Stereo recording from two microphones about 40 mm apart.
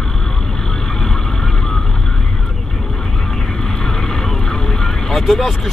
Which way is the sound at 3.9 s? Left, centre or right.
Centre.